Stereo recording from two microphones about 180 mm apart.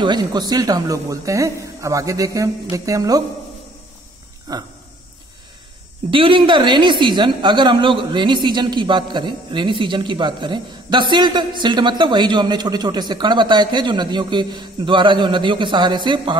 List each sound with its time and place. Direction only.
0.0 s a woman's voice: 25° right (ahead or behind)
4.5 s a woman's voice: 20° right (ahead or behind)
6.0 s a woman's voice: 30° right (ahead or behind)